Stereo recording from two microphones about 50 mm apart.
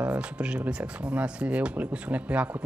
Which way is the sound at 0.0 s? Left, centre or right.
Right.